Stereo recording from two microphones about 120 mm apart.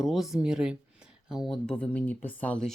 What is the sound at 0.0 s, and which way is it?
Speech, centre (ahead or behind).